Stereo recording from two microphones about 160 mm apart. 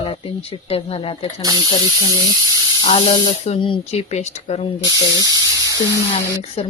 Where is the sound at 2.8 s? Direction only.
30° left (ahead or behind).